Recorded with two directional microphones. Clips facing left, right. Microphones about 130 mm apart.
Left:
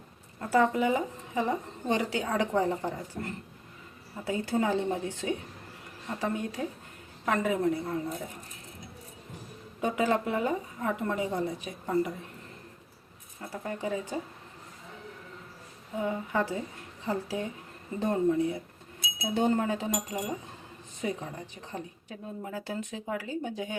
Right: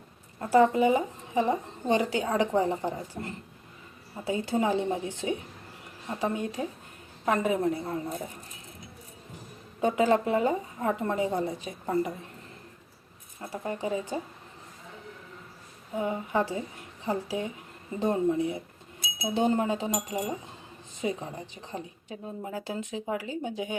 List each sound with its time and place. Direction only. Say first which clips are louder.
0.3 s speech: right 4 dB; 25° right (ahead or behind)
9.8 s speech: right 4 dB; 30° right (ahead or behind)
13.5 s speech: right 2 dB; 25° right (ahead or behind)
16.0 s speech: right 2 dB; 25° right (ahead or behind)